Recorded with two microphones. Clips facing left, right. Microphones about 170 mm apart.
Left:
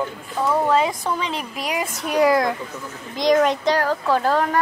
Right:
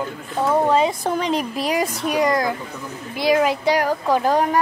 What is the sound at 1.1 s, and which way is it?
Speech, 45° right (ahead or behind).